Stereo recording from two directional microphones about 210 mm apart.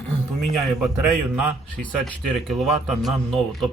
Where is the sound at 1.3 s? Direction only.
5° left (ahead or behind).